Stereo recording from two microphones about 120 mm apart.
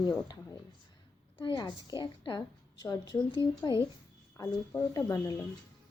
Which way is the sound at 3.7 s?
30° right (ahead or behind).